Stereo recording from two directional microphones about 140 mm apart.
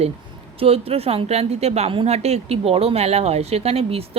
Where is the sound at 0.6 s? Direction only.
45° right (ahead or behind).